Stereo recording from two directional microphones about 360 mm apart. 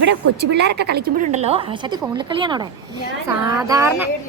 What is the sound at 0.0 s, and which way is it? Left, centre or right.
A woman's voice, right.